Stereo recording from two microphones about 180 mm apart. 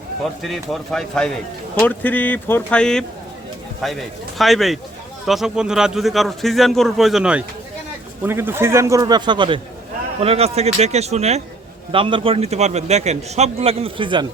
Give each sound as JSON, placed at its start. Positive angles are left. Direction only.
{"t": 0.4, "sound": "a man's voice", "side_deg": 0}